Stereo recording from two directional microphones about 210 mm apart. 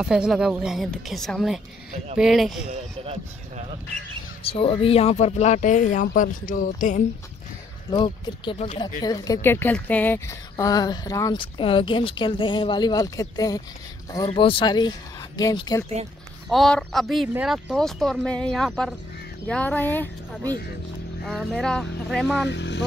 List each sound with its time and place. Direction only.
0.0 s speech: 5° right (ahead or behind)
2.7 s speech: 30° right (ahead or behind)
4.4 s speech: 25° left (ahead or behind)
7.9 s a woman's voice: 20° left (ahead or behind)
16.4 s a woman's voice: centre (ahead or behind)
21.2 s speech: centre (ahead or behind)
22.5 s speech: 55° left (ahead or behind)